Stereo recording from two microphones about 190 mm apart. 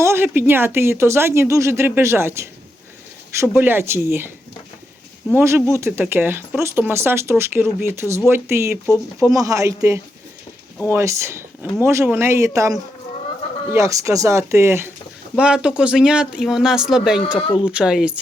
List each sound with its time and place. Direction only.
0.0 s speech: 15° right (ahead or behind)
5.3 s speech: 10° right (ahead or behind)